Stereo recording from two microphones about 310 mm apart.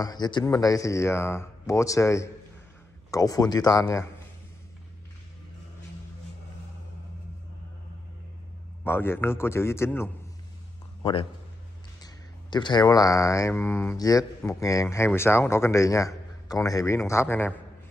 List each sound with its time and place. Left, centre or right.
0.0 s speech: centre
8.8 s speech: centre